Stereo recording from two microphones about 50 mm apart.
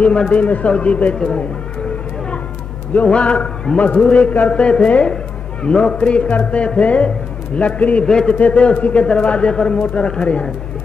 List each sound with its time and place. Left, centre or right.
0.3 s a man's voice: left
1.1 s a man's voice: centre
2.9 s a man's voice: left